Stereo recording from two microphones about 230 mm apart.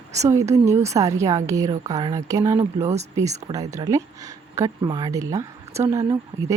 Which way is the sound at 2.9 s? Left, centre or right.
Right.